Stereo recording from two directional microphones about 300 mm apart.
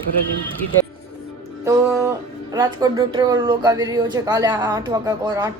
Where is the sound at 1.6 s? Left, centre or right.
Centre.